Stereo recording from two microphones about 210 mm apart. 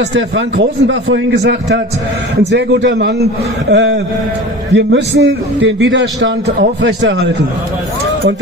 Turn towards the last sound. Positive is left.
turn(degrees=-60)  # may be behind; listen again after turning